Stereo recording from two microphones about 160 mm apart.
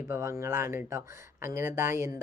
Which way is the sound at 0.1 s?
20° right (ahead or behind).